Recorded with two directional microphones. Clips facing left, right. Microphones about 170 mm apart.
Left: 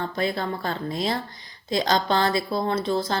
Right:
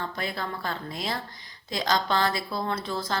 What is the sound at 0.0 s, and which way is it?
A woman's voice, 25° left (ahead or behind).